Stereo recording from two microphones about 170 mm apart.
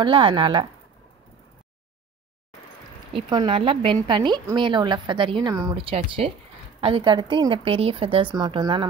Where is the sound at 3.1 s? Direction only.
25° right (ahead or behind).